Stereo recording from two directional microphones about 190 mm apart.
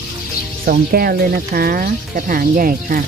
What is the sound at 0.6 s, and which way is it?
Speech, 50° right (ahead or behind).